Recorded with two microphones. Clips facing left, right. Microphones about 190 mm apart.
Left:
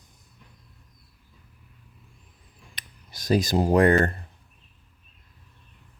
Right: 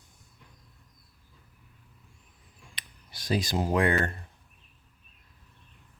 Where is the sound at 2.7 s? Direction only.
40° left (ahead or behind).